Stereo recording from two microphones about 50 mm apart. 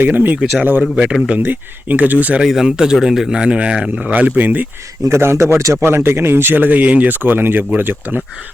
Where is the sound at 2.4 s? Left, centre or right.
Centre; by 4.7 s right.